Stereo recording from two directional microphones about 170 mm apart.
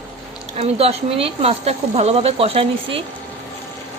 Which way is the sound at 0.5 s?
35° right (ahead or behind).